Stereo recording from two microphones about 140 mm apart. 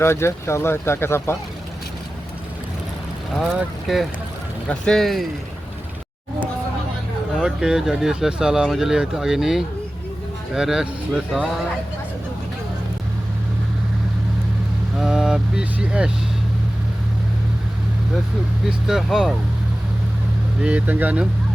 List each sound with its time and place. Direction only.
0.0 s speech: 20° left (ahead or behind)
3.9 s speech: centre (ahead or behind)
7.3 s speech: 5° right (ahead or behind)
14.9 s speech: 5° right (ahead or behind)
18.9 s speech: 5° right (ahead or behind)
20.6 s speech: 10° right (ahead or behind)